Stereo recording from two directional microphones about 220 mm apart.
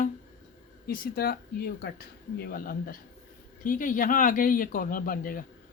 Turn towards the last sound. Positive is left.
turn(degrees=40)  # may be behind; listen again after turning